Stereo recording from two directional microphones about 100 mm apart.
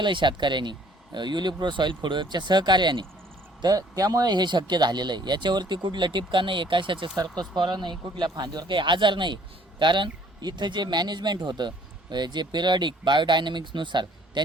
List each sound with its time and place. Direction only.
0.0 s speech: 50° right (ahead or behind)
3.6 s speech: 40° right (ahead or behind)